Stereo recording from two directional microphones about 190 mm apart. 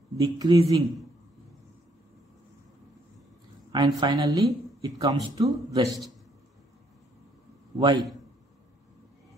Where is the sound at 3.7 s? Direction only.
20° right (ahead or behind).